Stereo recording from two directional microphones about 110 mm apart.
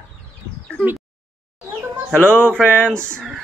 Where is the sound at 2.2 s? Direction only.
10° left (ahead or behind).